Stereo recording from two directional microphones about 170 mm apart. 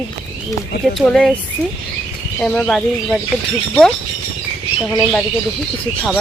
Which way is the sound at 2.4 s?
5° left (ahead or behind).